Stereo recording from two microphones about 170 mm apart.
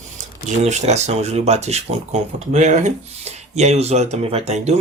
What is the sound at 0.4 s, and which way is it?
Speech, 40° right (ahead or behind).